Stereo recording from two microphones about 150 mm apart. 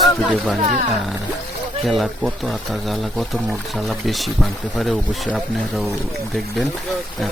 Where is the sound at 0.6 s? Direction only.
55° right (ahead or behind).